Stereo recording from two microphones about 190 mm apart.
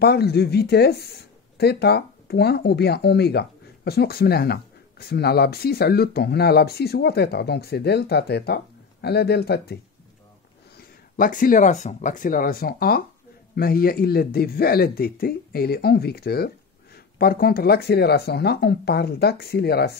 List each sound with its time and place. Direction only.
0.0 s speech: 55° left (ahead or behind)
10.8 s speech: 45° left (ahead or behind)